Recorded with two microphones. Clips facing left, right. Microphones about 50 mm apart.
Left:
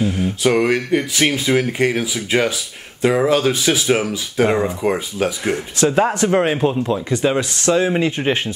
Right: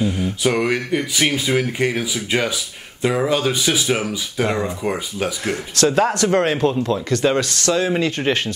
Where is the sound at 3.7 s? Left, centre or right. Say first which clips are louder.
Left 3 dB; centre.